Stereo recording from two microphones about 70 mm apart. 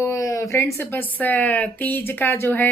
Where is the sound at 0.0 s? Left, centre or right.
Left.